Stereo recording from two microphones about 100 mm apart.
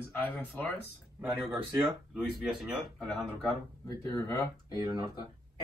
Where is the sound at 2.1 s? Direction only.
5° right (ahead or behind).